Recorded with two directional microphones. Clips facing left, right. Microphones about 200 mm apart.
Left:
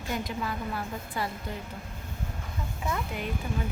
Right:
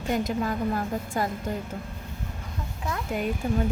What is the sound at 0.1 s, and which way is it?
A woman's voice, 45° right (ahead or behind).